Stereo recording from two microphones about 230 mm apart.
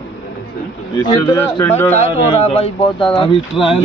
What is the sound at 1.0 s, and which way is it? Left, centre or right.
Speech, centre.